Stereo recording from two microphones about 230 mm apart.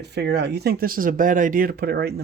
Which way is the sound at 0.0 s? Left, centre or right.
Right.